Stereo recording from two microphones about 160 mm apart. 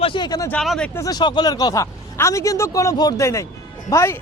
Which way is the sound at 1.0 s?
25° left (ahead or behind).